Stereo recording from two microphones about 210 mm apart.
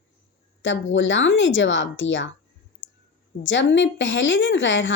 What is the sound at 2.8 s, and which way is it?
Clicking, 65° left (ahead or behind).